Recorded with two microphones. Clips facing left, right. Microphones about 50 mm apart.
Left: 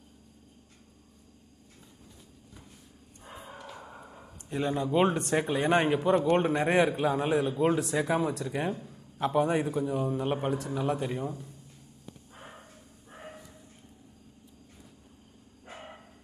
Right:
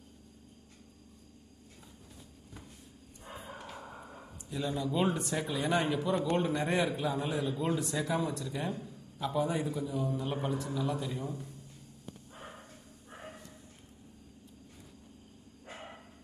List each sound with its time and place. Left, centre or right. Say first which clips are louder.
3.5 s music: left 1 dB; centre
3.8 s a sound: even; centre
4.5 s a man's voice: left 5 dB; left
5.0 s a man's voice: left 5 dB; left
7.0 s a man's voice: left 6 dB; left
8.5 s a man's voice: left 5 dB; left
9.8 s a man's voice: left 5 dB; left
12.4 s a sound: even; centre
13.1 s bow-wow: left 2 dB; centre
15.6 s dog: left 1 dB; centre